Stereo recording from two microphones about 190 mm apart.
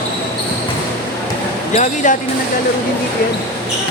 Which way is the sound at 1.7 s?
40° left (ahead or behind).